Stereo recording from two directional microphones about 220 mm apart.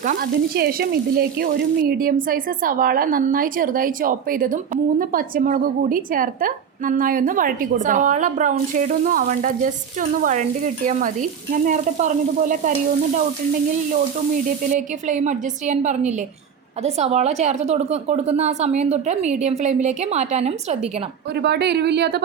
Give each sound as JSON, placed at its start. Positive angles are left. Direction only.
{"t": 0.0, "sound": "frying", "side_deg": -40}
{"t": 14.4, "sound": "frying", "side_deg": -35}
{"t": 21.3, "sound": "speech", "side_deg": -50}